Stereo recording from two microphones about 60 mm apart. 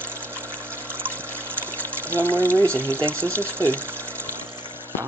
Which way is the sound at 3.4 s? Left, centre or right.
Right.